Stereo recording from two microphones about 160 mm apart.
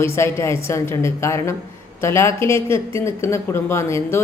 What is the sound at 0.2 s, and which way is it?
A man's voice, 15° left (ahead or behind).